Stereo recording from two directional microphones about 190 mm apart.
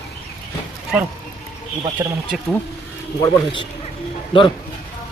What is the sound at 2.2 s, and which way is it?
Speech, centre (ahead or behind).